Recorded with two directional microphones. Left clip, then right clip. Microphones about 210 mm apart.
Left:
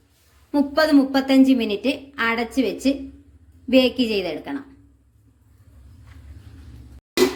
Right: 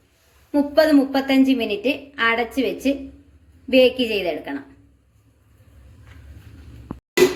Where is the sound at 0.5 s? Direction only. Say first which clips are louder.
Right 2 dB; 50° left (ahead or behind).